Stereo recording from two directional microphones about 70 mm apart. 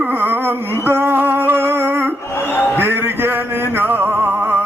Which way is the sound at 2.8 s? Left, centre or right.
Right.